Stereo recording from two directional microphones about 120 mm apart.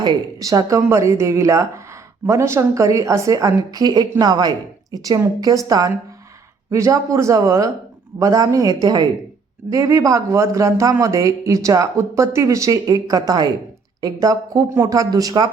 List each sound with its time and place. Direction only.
0.0 s speech: 30° right (ahead or behind)